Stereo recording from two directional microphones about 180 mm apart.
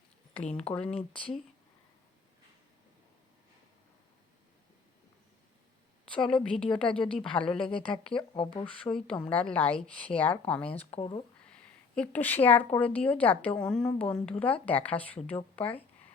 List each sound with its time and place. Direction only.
0.5 s speech: 5° left (ahead or behind)
6.1 s speech: 5° left (ahead or behind)
7.7 s speech: 30° left (ahead or behind)
8.6 s speech: 5° left (ahead or behind)
10.9 s speech: 30° left (ahead or behind)
11.5 s speech: 5° left (ahead or behind)